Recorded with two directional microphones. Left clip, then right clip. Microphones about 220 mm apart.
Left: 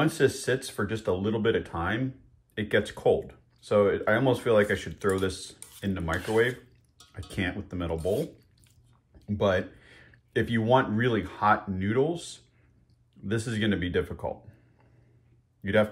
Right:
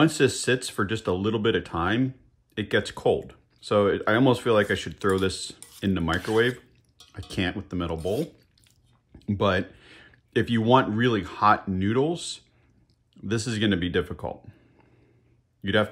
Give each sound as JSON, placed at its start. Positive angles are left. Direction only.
{"t": 0.0, "sound": "speech", "side_deg": -20}
{"t": 7.2, "sound": "speech", "side_deg": -15}
{"t": 9.2, "sound": "speech", "side_deg": -20}
{"t": 15.6, "sound": "speech", "side_deg": -20}